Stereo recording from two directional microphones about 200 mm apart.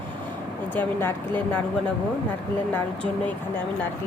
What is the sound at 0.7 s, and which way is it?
Speech, 10° left (ahead or behind).